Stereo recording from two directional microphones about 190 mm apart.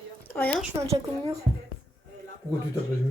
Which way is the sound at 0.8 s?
15° right (ahead or behind).